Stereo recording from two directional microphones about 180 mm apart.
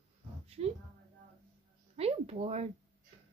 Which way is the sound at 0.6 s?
40° right (ahead or behind).